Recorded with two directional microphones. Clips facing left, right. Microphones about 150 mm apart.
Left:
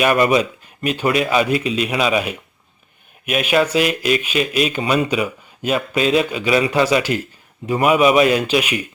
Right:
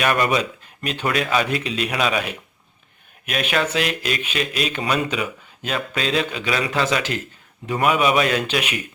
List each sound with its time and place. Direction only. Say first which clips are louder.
0.0 s speech: left 5 dB; 10° left (ahead or behind)